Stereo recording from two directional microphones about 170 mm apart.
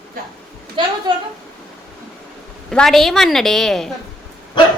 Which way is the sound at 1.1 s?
25° right (ahead or behind).